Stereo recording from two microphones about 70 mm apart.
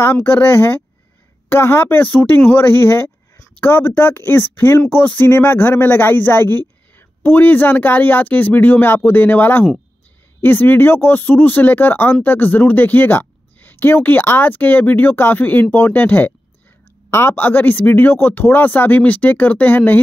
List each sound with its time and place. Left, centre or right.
0.0 s speech: left